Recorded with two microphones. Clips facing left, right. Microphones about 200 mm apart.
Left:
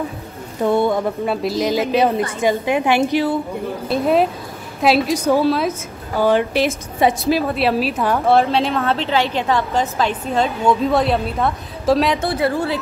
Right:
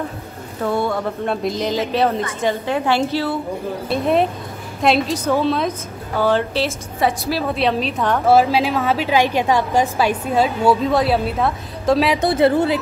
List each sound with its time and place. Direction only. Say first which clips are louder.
0.6 s speech: left 4 dB; 20° left (ahead or behind)
1.2 s a woman's voice: left 2 dB; 5° left (ahead or behind)
3.9 s a woman's voice: left 1 dB; centre (ahead or behind); by 7.4 s 20° left (ahead or behind)
7.4 s a woman's voice: left 1 dB; 5° left (ahead or behind)
8.4 s a woman's voice: right 1 dB; 5° right (ahead or behind)
12.2 s speech: right 4 dB; 25° right (ahead or behind)